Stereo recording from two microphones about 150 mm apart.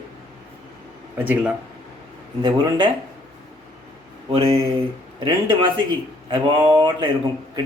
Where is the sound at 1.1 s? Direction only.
10° right (ahead or behind).